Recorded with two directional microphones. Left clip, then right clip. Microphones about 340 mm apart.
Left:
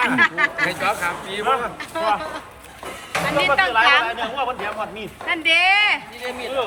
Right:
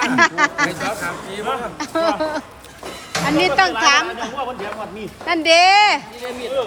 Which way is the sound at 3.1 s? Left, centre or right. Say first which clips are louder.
Right 1 dB; centre.